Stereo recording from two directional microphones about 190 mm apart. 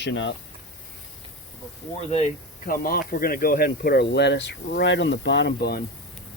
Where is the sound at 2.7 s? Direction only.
50° left (ahead or behind).